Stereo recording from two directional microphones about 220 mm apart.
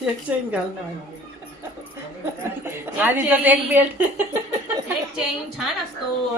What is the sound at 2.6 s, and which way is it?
A woman's voice, 10° right (ahead or behind).